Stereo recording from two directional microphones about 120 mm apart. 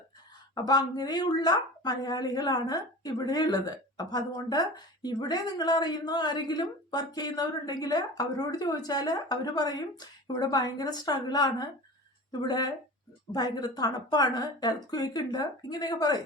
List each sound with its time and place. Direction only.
0.5 s a woman's voice: 35° left (ahead or behind)